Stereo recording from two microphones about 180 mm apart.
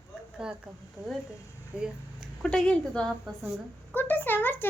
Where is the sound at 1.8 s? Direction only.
Centre (ahead or behind).